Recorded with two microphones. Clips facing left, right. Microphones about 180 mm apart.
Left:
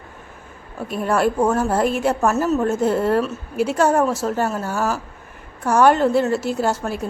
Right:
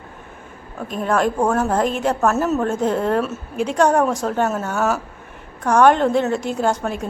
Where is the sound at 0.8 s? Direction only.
10° left (ahead or behind).